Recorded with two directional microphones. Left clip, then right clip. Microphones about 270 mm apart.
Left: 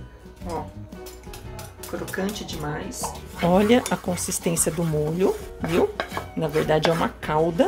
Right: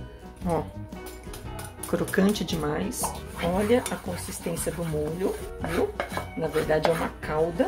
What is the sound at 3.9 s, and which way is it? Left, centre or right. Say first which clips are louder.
Speech: left 7 dB; left.